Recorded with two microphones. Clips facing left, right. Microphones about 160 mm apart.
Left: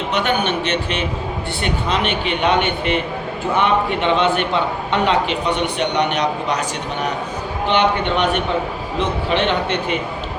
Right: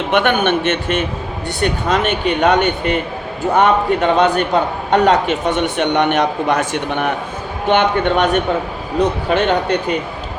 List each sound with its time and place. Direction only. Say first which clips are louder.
0.1 s a man's voice: right 5 dB; 55° right (ahead or behind)